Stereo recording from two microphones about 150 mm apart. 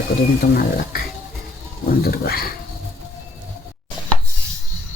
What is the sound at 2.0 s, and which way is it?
Speech, 90° left.